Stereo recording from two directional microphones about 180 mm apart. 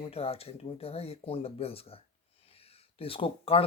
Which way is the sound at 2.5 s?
35° left (ahead or behind).